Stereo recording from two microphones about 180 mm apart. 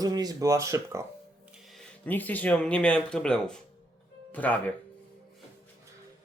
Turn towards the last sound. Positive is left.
turn(degrees=10)  # may be behind; listen again after turning